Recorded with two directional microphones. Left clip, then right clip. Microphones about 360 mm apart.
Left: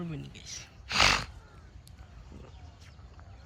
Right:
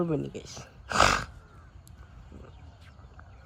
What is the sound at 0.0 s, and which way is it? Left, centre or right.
Speech, centre.